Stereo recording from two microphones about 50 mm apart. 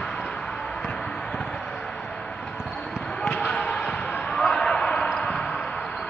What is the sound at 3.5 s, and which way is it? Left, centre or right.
Basketball bounce, left.